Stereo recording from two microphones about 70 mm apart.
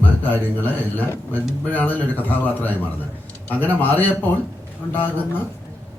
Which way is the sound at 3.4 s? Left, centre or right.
Left.